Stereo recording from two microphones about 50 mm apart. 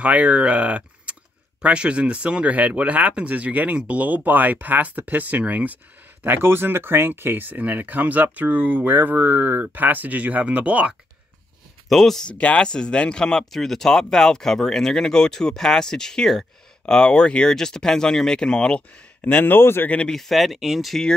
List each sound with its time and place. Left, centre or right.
0.0 s speech: right
6.2 s speech: right
11.9 s speech: centre
12.3 s speech: left
13.5 s speech: centre
19.2 s speech: left
20.1 s speech: centre